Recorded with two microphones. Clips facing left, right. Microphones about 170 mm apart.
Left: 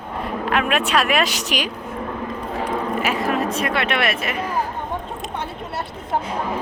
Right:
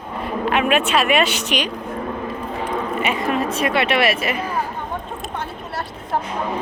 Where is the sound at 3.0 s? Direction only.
Centre (ahead or behind).